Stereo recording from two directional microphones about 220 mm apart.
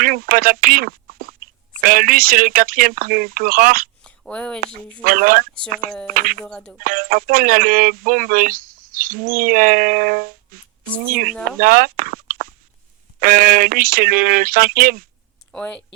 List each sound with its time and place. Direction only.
0.0 s speech: 40° right (ahead or behind)
4.0 s a sound: 5° left (ahead or behind)
5.0 s speech: 40° right (ahead or behind)
6.4 s speech: 5° left (ahead or behind)
6.7 s speech: 40° right (ahead or behind)
15.5 s speech: 5° left (ahead or behind)